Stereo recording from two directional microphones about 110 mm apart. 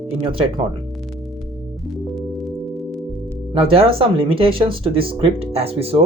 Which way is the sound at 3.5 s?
55° right (ahead or behind).